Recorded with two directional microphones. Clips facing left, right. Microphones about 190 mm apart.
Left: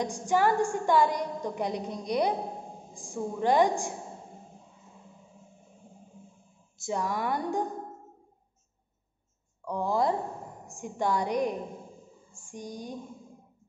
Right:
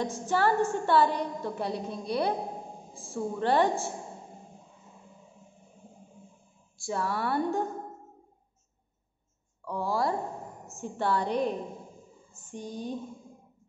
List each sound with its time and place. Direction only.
0.0 s a woman's voice: 15° left (ahead or behind)
6.8 s a woman's voice: 15° left (ahead or behind)
9.7 s a woman's voice: 20° left (ahead or behind)